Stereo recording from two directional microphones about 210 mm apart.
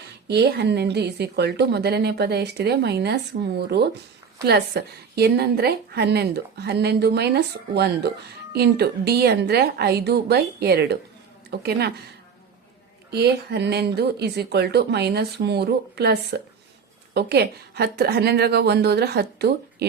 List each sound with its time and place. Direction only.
0.3 s a woman's voice: 50° right (ahead or behind)
13.1 s a woman's voice: 50° right (ahead or behind)